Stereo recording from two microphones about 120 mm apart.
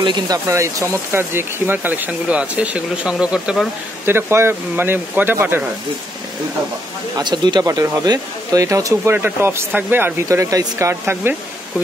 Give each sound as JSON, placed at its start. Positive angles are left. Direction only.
{"t": 0.0, "sound": "speech", "side_deg": -40}
{"t": 0.5, "sound": "speech", "side_deg": -25}
{"t": 4.0, "sound": "speech", "side_deg": -20}
{"t": 7.2, "sound": "speech", "side_deg": -35}